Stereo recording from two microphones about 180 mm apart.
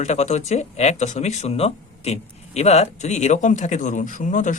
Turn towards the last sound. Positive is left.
turn(degrees=45)  # may be behind; listen again after turning